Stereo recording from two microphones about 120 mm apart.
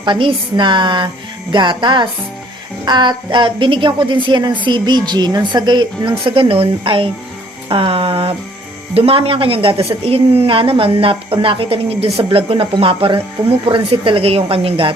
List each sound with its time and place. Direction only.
0.0 s a woman's voice: 45° right (ahead or behind)